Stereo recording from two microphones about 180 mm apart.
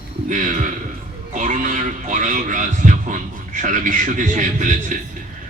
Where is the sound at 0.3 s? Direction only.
45° right (ahead or behind).